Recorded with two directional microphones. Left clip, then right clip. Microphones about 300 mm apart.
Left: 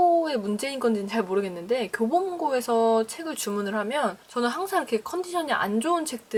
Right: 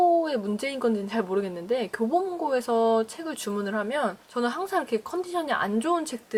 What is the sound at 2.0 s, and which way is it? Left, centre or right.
Speech, centre.